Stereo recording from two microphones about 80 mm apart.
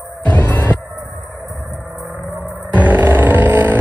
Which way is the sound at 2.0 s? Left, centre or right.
Right.